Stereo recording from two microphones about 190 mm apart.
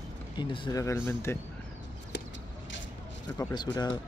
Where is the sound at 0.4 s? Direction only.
25° left (ahead or behind).